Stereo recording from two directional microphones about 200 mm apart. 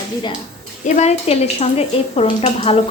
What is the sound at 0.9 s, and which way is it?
A woman's voice, 35° left (ahead or behind).